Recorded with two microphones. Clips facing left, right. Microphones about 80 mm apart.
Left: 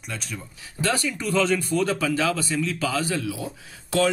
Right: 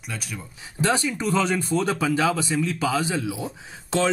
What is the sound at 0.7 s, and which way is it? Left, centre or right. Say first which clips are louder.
Speech: right 2 dB; right.